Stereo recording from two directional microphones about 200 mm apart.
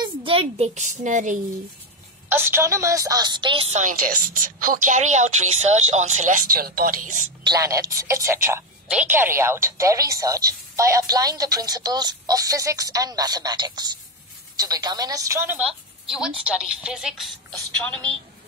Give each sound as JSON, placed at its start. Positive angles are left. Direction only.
{"t": 0.0, "sound": "a woman's voice", "side_deg": -25}
{"t": 2.2, "sound": "a woman's voice", "side_deg": -10}
{"t": 3.7, "sound": "a woman's voice", "side_deg": -40}
{"t": 7.4, "sound": "a woman's voice", "side_deg": -15}